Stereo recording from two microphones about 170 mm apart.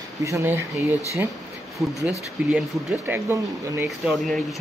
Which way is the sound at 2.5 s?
10° right (ahead or behind).